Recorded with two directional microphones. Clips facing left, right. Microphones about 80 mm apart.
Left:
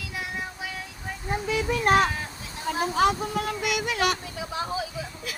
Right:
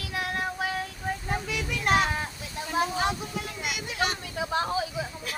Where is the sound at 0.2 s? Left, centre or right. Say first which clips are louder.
Right 4 dB; right.